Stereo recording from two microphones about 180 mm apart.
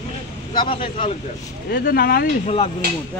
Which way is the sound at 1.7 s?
60° left (ahead or behind).